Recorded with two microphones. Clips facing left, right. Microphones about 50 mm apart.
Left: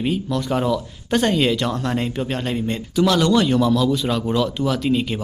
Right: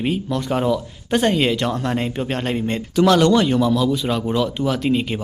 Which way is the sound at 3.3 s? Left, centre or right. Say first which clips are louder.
Even; right.